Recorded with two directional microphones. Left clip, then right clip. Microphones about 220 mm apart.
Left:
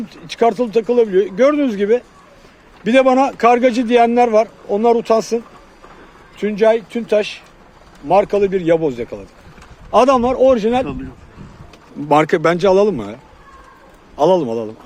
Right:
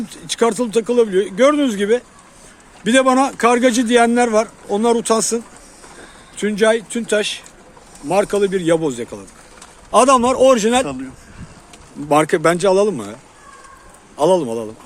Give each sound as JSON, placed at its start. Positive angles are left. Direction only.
{"t": 0.1, "sound": "a man's voice", "side_deg": 0}
{"t": 12.0, "sound": "a man's voice", "side_deg": 15}
{"t": 14.2, "sound": "a man's voice", "side_deg": 10}